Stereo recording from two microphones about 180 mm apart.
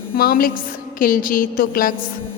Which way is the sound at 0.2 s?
55° left (ahead or behind).